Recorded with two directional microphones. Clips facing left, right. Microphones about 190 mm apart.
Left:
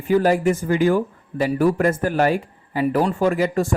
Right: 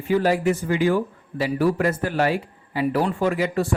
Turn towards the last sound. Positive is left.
turn(degrees=45)  # may be behind; listen again after turning